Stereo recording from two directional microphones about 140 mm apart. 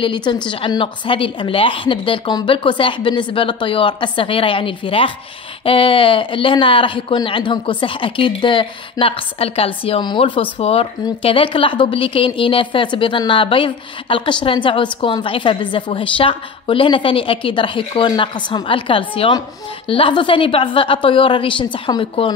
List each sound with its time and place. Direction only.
0.0 s speech: 35° left (ahead or behind)